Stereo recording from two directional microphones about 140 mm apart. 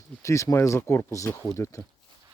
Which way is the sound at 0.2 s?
20° left (ahead or behind).